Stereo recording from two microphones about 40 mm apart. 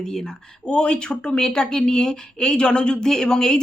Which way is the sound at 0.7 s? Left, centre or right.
Left.